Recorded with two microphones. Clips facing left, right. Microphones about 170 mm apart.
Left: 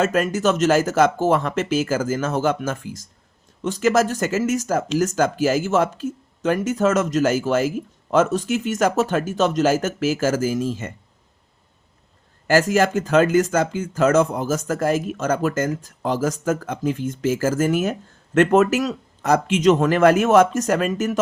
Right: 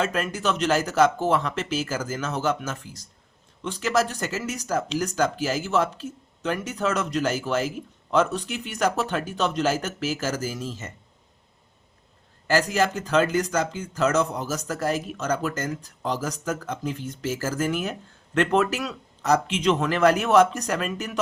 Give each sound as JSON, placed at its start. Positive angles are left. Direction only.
{"t": 0.0, "sound": "speech", "side_deg": 45}
{"t": 12.5, "sound": "speech", "side_deg": 50}